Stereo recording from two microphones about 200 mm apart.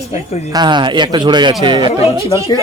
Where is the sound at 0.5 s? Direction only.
20° right (ahead or behind).